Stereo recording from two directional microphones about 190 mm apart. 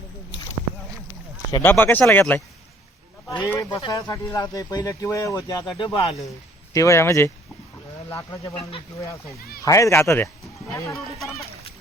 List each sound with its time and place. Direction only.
1.6 s speech: 10° left (ahead or behind); by 6.1 s 25° left (ahead or behind)
6.7 s speech: 15° left (ahead or behind)
9.6 s speech: 15° left (ahead or behind)